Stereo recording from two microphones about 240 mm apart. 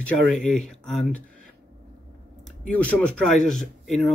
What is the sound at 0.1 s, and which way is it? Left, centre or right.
Speech, centre.